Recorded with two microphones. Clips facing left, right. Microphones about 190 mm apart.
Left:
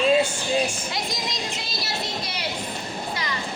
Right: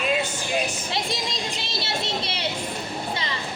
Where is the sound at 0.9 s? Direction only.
25° right (ahead or behind).